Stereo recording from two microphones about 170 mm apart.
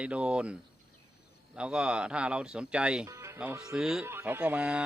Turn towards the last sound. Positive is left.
turn(degrees=-5)  # may be behind; listen again after turning